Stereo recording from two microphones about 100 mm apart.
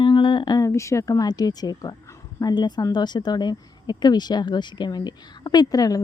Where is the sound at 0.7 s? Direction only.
30° left (ahead or behind).